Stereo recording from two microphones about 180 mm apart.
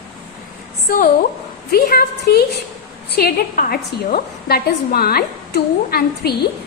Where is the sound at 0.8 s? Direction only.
50° left (ahead or behind).